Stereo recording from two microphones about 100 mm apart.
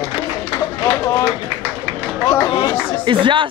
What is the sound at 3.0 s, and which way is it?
Speech, 55° right (ahead or behind).